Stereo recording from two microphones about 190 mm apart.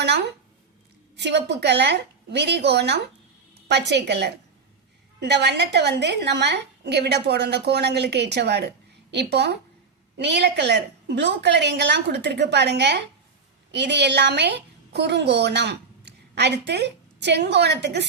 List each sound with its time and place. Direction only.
0.0 s a woman's voice: 65° right (ahead or behind)